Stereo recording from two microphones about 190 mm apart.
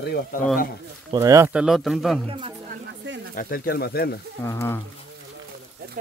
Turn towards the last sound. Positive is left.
turn(degrees=15)  # may be behind; listen again after turning